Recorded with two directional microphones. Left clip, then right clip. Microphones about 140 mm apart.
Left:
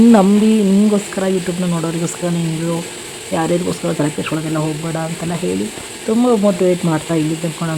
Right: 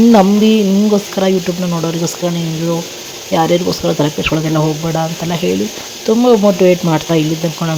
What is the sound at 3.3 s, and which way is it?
Speech, 15° right (ahead or behind).